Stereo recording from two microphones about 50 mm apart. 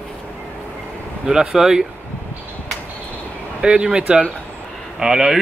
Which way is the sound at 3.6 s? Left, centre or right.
Centre.